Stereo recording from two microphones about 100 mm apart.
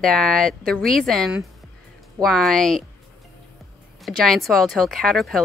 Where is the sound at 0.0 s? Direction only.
5° left (ahead or behind).